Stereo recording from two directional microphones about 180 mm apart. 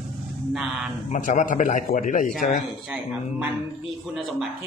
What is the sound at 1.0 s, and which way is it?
A man's voice, 40° left (ahead or behind).